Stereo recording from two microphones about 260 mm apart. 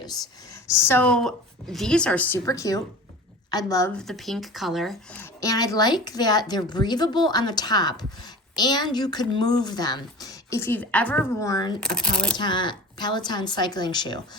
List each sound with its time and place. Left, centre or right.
0.7 s speech: centre
11.8 s speech: centre
12.4 s speech: centre